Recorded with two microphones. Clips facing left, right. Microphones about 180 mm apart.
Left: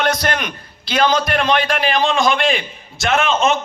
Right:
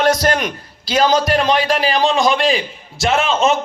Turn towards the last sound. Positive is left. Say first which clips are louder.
# right 1 dB
turn(degrees=-35)  # may be behind; listen again after turning